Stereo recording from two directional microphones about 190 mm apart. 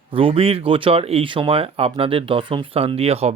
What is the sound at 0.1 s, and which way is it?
Speech, 30° right (ahead or behind).